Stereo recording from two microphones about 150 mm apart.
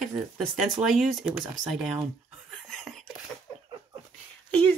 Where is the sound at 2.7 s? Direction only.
5° left (ahead or behind).